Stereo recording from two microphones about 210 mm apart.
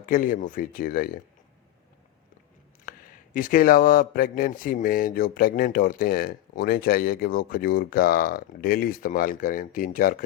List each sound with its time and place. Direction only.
0.0 s speech: 40° left (ahead or behind)
2.9 s a sound: 40° left (ahead or behind)
3.3 s speech: 40° left (ahead or behind)